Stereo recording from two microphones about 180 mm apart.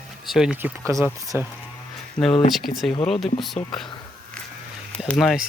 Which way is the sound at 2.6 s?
Centre (ahead or behind).